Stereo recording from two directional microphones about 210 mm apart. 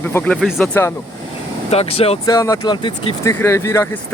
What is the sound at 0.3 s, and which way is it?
Speech, 5° right (ahead or behind).